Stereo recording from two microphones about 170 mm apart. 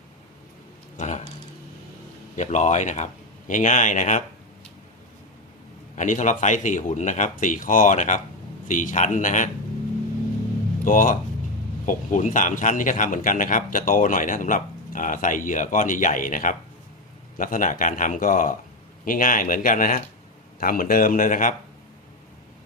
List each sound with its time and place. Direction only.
0.9 s speech: 45° left (ahead or behind)
2.3 s speech: 45° left (ahead or behind)
6.0 s speech: 45° left (ahead or behind)
10.8 s speech: 50° left (ahead or behind)